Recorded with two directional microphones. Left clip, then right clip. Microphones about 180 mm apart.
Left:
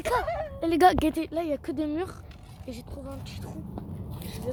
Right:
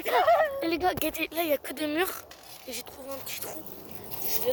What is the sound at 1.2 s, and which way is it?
Speech, centre (ahead or behind).